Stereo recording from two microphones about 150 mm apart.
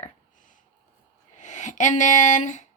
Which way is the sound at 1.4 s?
55° left (ahead or behind).